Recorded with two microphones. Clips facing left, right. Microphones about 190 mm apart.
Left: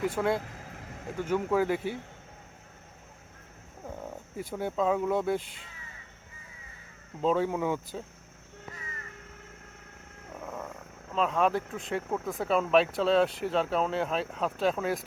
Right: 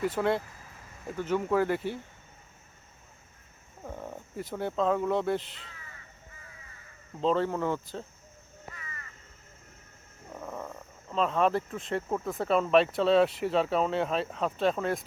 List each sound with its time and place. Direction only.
0.0 s speech: 5° left (ahead or behind)
0.4 s vehicle: 75° left (ahead or behind)
1.2 s speech: 10° left (ahead or behind)
4.5 s speech: 5° left (ahead or behind)
7.2 s speech: 10° left (ahead or behind)
10.4 s a sound: centre (ahead or behind)
11.1 s speech: centre (ahead or behind)